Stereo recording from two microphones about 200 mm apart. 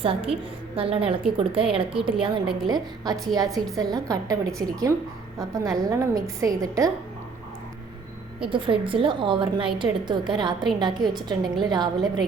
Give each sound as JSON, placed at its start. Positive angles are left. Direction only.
{"t": 0.0, "sound": "a woman's voice", "side_deg": -30}
{"t": 8.4, "sound": "a woman's voice", "side_deg": -25}